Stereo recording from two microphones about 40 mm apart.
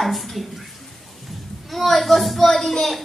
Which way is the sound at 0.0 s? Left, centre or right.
Centre.